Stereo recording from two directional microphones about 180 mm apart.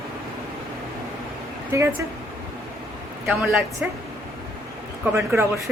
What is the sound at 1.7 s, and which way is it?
Speech, 15° right (ahead or behind).